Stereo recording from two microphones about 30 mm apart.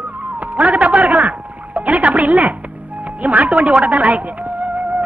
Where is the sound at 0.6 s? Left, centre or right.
Right.